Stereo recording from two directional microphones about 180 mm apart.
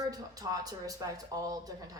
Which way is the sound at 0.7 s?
20° right (ahead or behind).